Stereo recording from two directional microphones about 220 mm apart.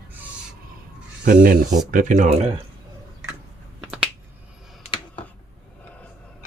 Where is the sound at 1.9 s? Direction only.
35° right (ahead or behind).